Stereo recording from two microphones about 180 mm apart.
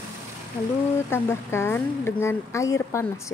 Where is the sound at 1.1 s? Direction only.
15° left (ahead or behind).